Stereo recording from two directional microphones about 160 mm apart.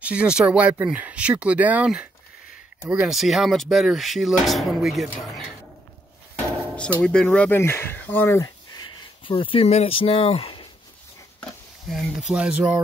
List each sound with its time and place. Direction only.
0.0 s speech: 5° right (ahead or behind)
7.0 s speech: 5° left (ahead or behind)
9.2 s speech: 35° left (ahead or behind)
11.9 s speech: 5° right (ahead or behind)